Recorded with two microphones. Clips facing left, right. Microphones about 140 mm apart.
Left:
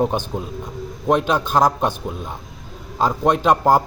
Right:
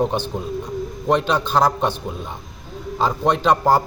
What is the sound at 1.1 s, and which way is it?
Speech, 5° left (ahead or behind).